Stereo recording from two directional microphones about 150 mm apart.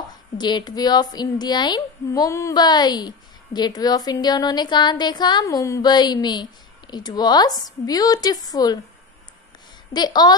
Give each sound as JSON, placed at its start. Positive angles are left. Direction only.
{"t": 0.4, "sound": "a woman's voice", "side_deg": 30}
{"t": 9.9, "sound": "a woman's voice", "side_deg": 30}